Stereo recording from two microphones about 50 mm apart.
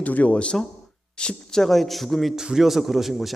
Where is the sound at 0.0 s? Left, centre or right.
Left; by 2.3 s centre.